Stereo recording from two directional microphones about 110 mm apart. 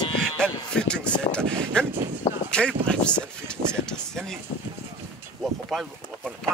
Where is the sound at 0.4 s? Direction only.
5° left (ahead or behind).